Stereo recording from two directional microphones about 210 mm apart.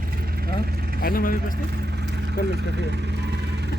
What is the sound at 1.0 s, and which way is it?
Speech, 45° left (ahead or behind).